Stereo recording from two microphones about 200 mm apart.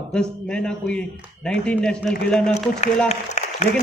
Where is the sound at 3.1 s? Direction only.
35° left (ahead or behind).